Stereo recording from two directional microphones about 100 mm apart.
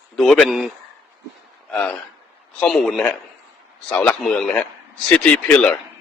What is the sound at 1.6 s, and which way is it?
A man's voice, 10° left (ahead or behind).